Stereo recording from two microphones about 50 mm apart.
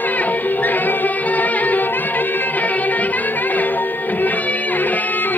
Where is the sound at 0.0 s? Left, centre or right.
Left.